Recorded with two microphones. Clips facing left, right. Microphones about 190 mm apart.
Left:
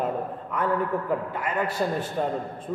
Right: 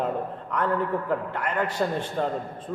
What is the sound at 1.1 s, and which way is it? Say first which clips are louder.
A man's voice: even; 5° left (ahead or behind).